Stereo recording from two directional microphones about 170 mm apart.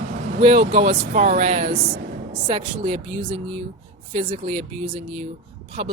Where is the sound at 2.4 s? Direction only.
30° right (ahead or behind).